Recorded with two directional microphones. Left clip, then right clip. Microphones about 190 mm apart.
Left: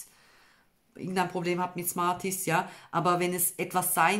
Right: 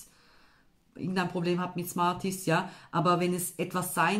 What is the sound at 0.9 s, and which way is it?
Speech, 40° left (ahead or behind).